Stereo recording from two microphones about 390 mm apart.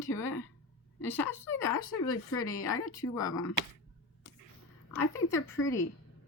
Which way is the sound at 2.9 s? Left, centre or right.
Centre.